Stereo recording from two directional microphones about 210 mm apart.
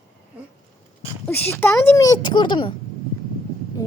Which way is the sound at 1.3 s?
10° left (ahead or behind).